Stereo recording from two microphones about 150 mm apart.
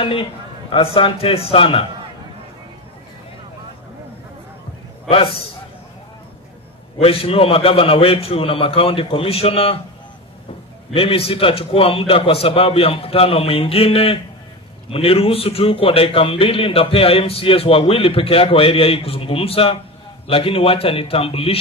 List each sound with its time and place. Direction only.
0.0 s a man's voice: 35° left (ahead or behind)
5.0 s a man's voice: 40° left (ahead or behind)
7.0 s a man's voice: 40° left (ahead or behind)
10.9 s a man's voice: 40° left (ahead or behind)